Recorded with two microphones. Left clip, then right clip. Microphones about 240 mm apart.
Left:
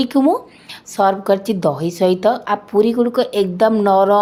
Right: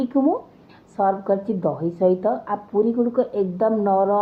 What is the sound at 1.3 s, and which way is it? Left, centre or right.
Speech, left.